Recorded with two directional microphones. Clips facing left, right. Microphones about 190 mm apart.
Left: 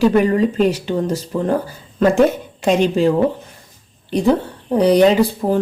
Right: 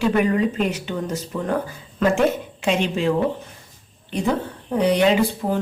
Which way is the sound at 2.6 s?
40° left (ahead or behind).